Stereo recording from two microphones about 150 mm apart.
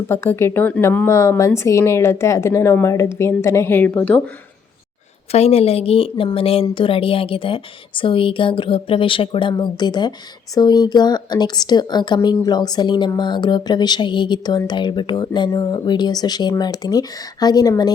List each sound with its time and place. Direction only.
0.1 s speech: 15° left (ahead or behind)
5.3 s speech: 45° left (ahead or behind); by 17.9 s 25° left (ahead or behind)